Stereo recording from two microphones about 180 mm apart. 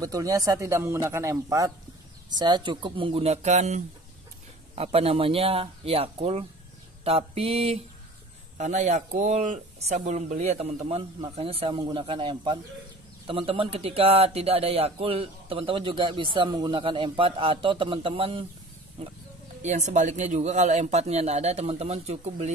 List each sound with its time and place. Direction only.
0.0 s speech: 20° right (ahead or behind); by 22.5 s 35° right (ahead or behind)